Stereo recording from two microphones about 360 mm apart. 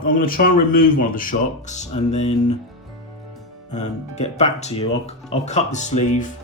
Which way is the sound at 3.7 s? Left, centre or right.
Centre.